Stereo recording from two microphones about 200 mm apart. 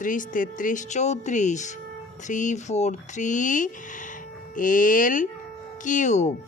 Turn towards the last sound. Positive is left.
turn(degrees=35)  # may be behind; listen again after turning